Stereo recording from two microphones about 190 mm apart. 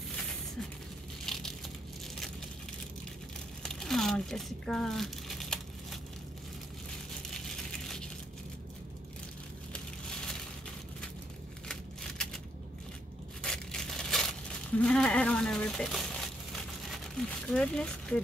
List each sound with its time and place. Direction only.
1.2 s crushing: centre (ahead or behind)
3.6 s crumpling: centre (ahead or behind)
7.3 s a sound: 5° left (ahead or behind)
11.6 s a sound: 5° left (ahead or behind)
13.4 s crushing: 5° left (ahead or behind)
14.8 s speech: 5° left (ahead or behind)
17.5 s speech: 5° left (ahead or behind)